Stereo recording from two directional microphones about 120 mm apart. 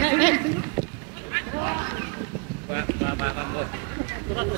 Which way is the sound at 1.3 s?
25° right (ahead or behind).